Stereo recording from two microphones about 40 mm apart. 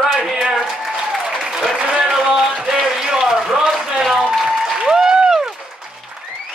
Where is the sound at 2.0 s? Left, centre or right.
Centre.